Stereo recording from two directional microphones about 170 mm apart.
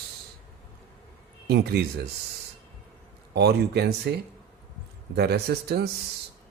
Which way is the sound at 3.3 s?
70° right (ahead or behind).